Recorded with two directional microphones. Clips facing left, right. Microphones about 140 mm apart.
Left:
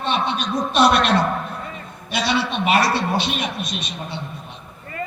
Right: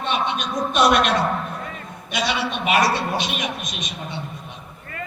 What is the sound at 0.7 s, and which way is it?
A man's voice, 35° left (ahead or behind).